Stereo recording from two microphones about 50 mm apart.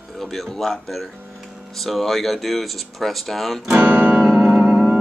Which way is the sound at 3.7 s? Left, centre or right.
Right.